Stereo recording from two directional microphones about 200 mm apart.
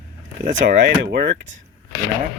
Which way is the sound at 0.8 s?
60° right (ahead or behind).